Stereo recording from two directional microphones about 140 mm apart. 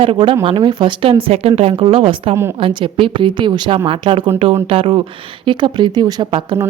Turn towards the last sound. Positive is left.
turn(degrees=-35)  # may be behind; listen again after turning